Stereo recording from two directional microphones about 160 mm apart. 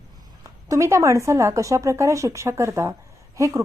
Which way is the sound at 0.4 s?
20° right (ahead or behind).